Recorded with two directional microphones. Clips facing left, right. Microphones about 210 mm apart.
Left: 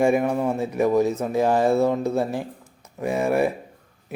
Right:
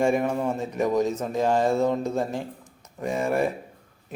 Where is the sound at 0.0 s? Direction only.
10° left (ahead or behind).